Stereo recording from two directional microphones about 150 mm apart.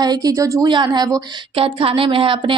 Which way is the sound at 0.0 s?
25° right (ahead or behind).